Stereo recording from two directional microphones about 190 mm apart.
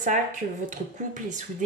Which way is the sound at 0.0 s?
40° right (ahead or behind).